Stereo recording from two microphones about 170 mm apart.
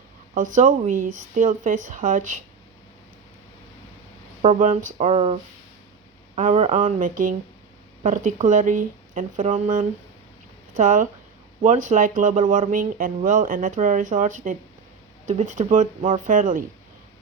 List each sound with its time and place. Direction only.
0.3 s speech: 50° right (ahead or behind)
4.4 s speech: 45° right (ahead or behind)